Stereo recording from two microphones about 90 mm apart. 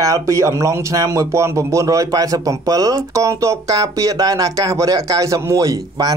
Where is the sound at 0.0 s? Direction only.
35° right (ahead or behind).